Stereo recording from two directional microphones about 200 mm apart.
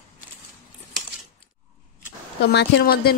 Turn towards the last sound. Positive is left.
turn(degrees=50)  # may be behind; listen again after turning